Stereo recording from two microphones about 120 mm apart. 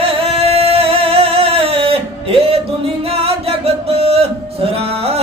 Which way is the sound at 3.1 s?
55° right (ahead or behind).